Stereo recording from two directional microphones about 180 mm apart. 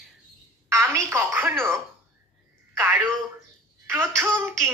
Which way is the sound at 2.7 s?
10° right (ahead or behind).